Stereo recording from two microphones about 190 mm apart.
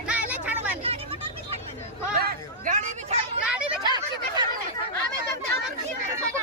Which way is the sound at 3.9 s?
20° right (ahead or behind).